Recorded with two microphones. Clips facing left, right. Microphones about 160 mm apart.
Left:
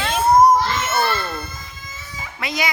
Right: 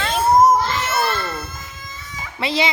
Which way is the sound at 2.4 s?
30° right (ahead or behind).